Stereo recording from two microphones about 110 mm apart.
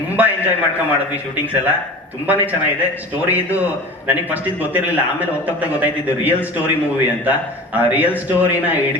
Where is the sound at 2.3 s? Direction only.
15° right (ahead or behind).